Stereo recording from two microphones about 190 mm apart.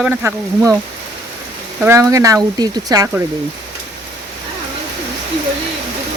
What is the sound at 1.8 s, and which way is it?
Speech, 15° right (ahead or behind).